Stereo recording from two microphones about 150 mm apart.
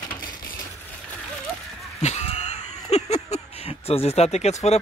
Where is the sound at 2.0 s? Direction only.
45° left (ahead or behind).